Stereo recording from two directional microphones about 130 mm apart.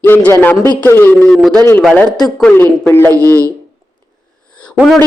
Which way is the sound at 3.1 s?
25° right (ahead or behind).